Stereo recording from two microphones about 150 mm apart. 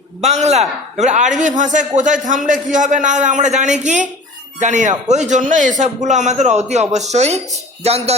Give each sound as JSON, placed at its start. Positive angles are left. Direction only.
{"t": 0.2, "sound": "a man's voice", "side_deg": -50}